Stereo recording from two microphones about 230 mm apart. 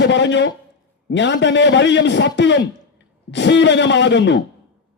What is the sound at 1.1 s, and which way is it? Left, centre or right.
A man's voice, left.